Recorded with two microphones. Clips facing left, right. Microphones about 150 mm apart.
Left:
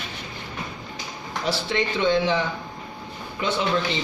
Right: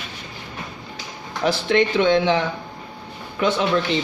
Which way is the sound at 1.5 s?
65° right (ahead or behind).